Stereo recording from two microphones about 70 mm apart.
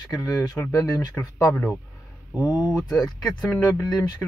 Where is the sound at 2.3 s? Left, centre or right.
Left.